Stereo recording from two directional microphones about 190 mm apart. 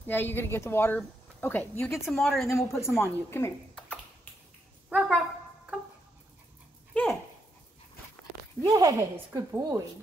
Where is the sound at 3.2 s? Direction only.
15° left (ahead or behind).